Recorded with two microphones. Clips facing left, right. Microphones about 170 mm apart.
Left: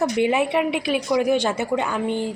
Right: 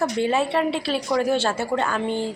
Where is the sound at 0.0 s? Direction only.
15° left (ahead or behind).